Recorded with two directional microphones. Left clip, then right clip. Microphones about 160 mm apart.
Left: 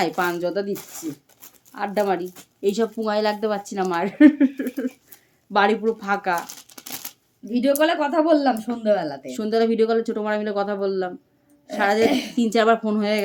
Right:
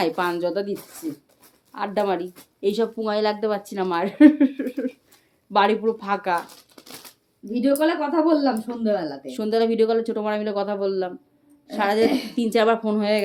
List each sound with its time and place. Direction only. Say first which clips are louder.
0.0 s speech: even; 5° left (ahead or behind)
1.7 s speech: left 1 dB; centre (ahead or behind)
6.7 s a sound: left 5 dB; 30° left (ahead or behind)
7.4 s speech: left 1 dB; 55° left (ahead or behind)
9.2 s speech: even; 10° left (ahead or behind)
12.0 s speech: left 1 dB; 60° left (ahead or behind)
12.4 s speech: left 1 dB; 10° left (ahead or behind)